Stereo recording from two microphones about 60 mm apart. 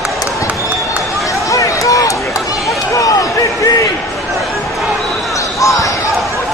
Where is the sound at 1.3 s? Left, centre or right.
Left.